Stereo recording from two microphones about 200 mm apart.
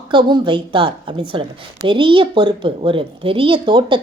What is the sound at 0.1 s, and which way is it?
A woman's voice, 25° right (ahead or behind).